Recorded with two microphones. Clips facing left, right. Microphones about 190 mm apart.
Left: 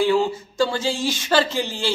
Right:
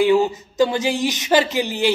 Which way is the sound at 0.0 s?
15° right (ahead or behind).